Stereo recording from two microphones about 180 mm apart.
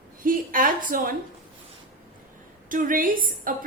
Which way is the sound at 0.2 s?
50° right (ahead or behind).